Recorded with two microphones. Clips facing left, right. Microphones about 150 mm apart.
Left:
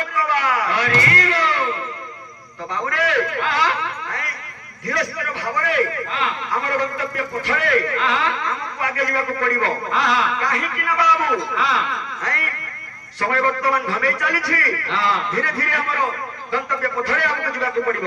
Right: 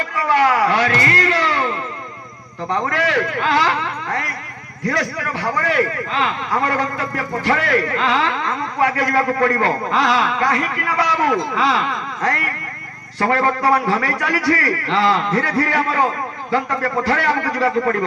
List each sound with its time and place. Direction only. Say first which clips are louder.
0.3 s a sound: right 8 dB; 35° right (ahead or behind)
2.7 s a man's voice: right 3 dB; 30° right (ahead or behind)
4.8 s a man's voice: right 3 dB; 35° right (ahead or behind)